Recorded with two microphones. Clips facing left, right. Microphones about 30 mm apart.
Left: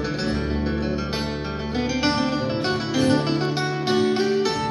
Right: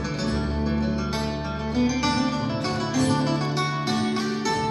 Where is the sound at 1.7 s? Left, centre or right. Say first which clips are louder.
Even; left.